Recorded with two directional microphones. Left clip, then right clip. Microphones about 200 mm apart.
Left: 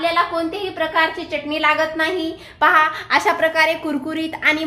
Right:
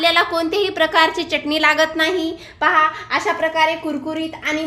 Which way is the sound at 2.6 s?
5° left (ahead or behind).